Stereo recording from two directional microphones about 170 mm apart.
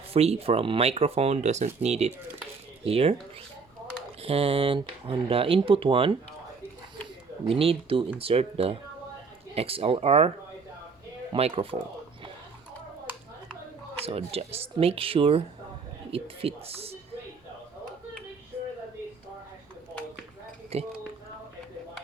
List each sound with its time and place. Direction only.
0.1 s speech: 35° right (ahead or behind)
4.2 s speech: 35° right (ahead or behind)
7.4 s speech: 35° right (ahead or behind)
14.0 s speech: 35° right (ahead or behind)
20.7 s speech: 35° right (ahead or behind)